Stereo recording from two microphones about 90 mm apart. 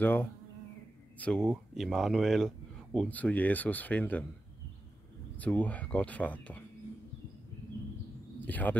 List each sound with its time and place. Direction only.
0.0 s speech: 20° left (ahead or behind)
1.4 s speech: 5° right (ahead or behind)
3.1 s speech: 15° left (ahead or behind)
5.4 s speech: 15° left (ahead or behind)
8.4 s speech: 20° left (ahead or behind)